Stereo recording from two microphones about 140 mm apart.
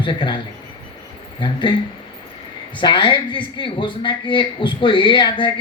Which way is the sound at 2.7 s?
35° left (ahead or behind).